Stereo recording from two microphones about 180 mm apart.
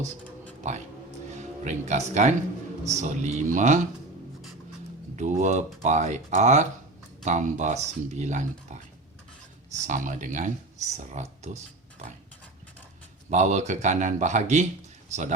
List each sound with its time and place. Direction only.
0.7 s speech: 45° right (ahead or behind)
5.1 s speech: 40° right (ahead or behind)
9.8 s speech: 45° right (ahead or behind)
13.3 s speech: 40° right (ahead or behind)